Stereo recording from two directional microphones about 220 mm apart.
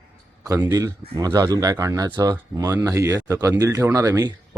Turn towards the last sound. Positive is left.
turn(degrees=-15)  # may be behind; listen again after turning